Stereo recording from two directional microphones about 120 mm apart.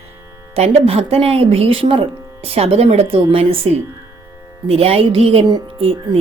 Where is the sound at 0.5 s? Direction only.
60° right (ahead or behind).